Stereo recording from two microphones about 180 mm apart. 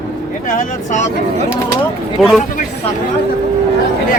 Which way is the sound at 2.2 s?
Centre (ahead or behind).